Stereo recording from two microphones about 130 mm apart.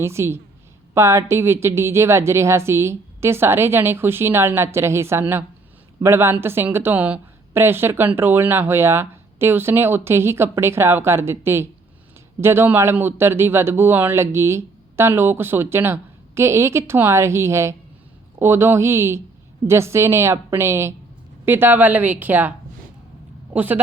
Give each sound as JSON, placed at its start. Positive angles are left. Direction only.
{"t": 0.0, "sound": "a woman's voice", "side_deg": -20}
{"t": 23.6, "sound": "speech", "side_deg": -15}